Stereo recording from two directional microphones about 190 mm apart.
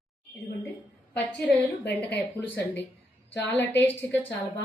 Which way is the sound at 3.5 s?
10° left (ahead or behind).